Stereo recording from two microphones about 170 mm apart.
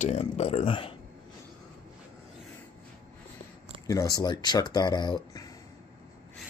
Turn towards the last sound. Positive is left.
turn(degrees=25)  # may be behind; listen again after turning